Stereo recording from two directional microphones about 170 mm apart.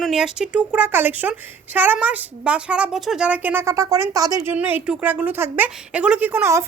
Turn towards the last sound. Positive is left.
turn(degrees=-15)  # may be behind; listen again after turning